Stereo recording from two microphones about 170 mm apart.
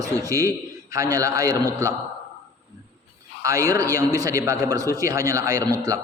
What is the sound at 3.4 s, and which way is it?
A man's voice, 20° right (ahead or behind).